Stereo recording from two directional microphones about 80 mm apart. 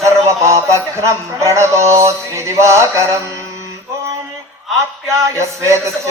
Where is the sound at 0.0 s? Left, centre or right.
Right.